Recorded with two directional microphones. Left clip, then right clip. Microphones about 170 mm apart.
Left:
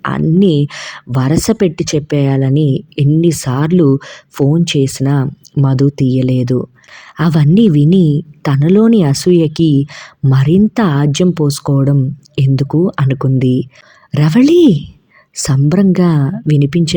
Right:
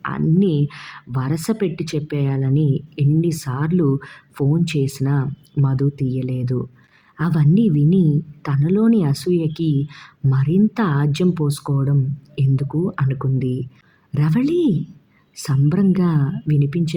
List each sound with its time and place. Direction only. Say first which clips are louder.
0.0 s a woman's voice: left 7 dB; 40° left (ahead or behind)